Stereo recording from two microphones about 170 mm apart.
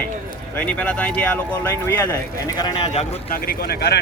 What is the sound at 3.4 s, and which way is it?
Speech, 65° left (ahead or behind).